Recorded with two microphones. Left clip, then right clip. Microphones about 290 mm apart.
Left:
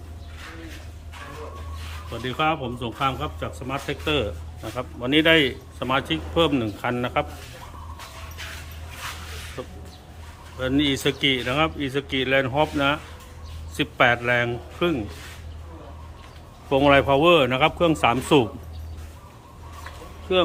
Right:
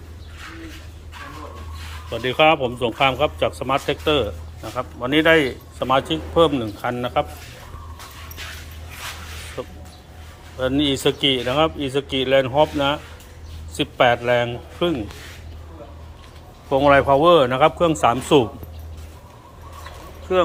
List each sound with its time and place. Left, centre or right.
2.1 s a man's voice: centre
9.6 s a man's voice: centre
16.6 s a man's voice: centre